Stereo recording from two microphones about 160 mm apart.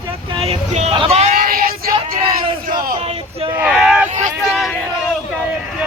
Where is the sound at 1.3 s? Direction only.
65° right (ahead or behind).